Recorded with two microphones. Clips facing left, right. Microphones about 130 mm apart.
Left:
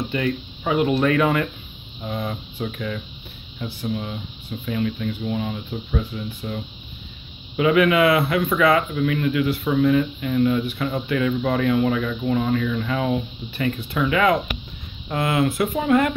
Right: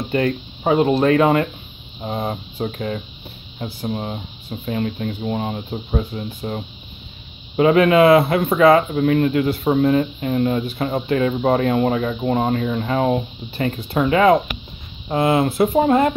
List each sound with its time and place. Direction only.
0.1 s speech: 40° right (ahead or behind)